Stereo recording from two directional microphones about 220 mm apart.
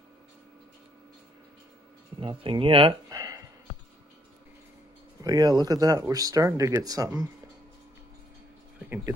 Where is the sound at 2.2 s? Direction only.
25° right (ahead or behind).